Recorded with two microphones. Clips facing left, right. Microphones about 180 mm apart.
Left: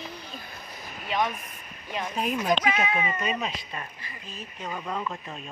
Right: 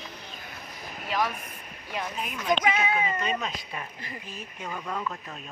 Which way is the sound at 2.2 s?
35° left (ahead or behind).